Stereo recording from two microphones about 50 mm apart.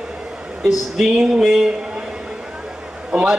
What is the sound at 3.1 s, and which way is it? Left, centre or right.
Speech, centre.